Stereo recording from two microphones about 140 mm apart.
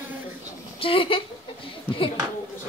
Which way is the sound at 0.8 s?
40° left (ahead or behind).